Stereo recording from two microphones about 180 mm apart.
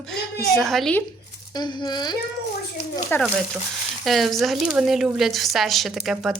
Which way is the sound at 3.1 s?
10° left (ahead or behind).